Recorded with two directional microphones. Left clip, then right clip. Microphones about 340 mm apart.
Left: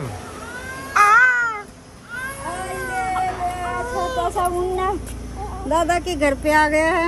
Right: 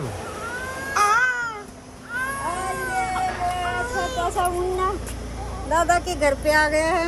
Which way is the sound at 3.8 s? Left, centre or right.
Centre.